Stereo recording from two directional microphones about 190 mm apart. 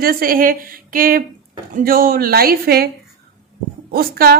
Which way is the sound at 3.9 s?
55° right (ahead or behind).